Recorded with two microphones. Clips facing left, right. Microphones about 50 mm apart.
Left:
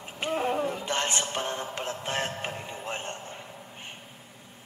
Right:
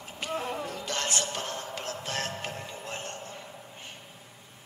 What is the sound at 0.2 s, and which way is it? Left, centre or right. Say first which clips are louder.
Speech: left 6 dB; left.